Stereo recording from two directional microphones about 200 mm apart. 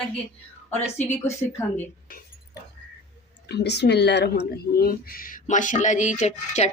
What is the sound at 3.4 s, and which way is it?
Speech, 55° left (ahead or behind).